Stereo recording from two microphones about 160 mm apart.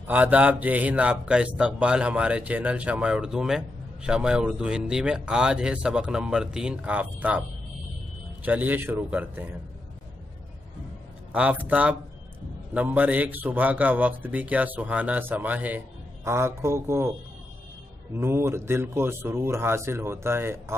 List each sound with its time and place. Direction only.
0.0 s speech: 10° right (ahead or behind)
11.3 s speech: 10° right (ahead or behind)
18.1 s speech: 15° right (ahead or behind)